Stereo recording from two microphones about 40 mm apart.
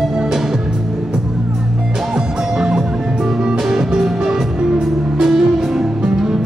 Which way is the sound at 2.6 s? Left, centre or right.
Centre.